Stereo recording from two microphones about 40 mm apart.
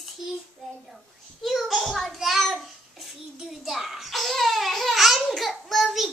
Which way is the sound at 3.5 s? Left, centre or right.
Centre.